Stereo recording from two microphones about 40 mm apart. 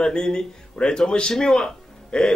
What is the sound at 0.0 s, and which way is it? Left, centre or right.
A man's voice, left.